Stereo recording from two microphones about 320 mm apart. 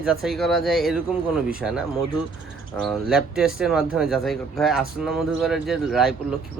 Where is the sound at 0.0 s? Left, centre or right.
Centre.